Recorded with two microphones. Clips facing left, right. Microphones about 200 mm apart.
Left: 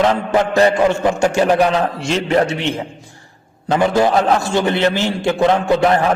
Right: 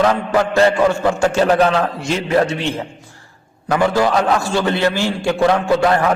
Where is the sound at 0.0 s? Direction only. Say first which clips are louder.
Even; 20° left (ahead or behind).